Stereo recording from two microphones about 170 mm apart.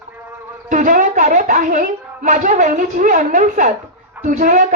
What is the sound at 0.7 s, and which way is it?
A woman's voice, 50° right (ahead or behind).